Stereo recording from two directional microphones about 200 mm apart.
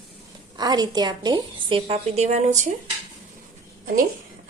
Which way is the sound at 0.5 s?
20° right (ahead or behind).